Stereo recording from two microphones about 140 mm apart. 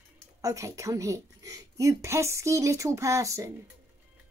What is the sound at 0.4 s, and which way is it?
A woman's voice, 25° right (ahead or behind).